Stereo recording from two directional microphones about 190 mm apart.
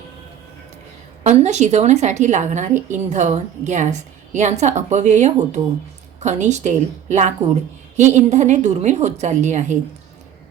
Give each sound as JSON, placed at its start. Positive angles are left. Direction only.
{"t": 1.2, "sound": "a woman's voice", "side_deg": -40}